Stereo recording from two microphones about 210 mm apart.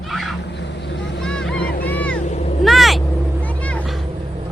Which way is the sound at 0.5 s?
55° left (ahead or behind).